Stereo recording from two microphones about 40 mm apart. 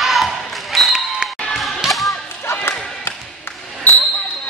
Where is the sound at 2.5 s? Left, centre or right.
Left.